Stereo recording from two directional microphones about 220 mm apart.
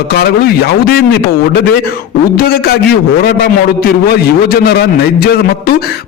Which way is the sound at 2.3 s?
45° left (ahead or behind).